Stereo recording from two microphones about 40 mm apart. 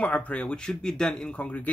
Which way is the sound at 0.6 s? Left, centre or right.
Centre.